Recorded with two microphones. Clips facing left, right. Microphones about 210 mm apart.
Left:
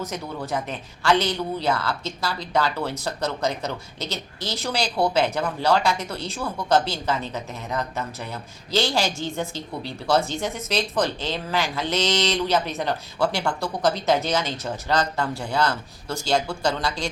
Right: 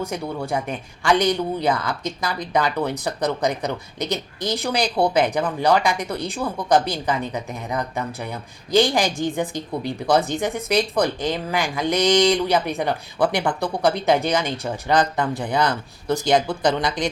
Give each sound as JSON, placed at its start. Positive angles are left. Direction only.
{"t": 0.0, "sound": "speech", "side_deg": -10}